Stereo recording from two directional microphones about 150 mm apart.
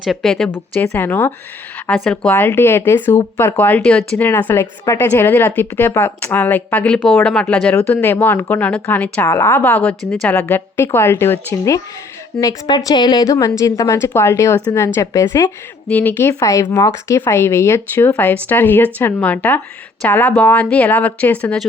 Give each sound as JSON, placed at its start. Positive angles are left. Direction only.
{"t": 0.0, "sound": "speech", "side_deg": 0}
{"t": 12.4, "sound": "a woman's voice", "side_deg": 25}